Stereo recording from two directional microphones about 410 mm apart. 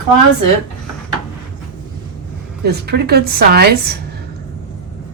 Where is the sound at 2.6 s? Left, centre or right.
Right.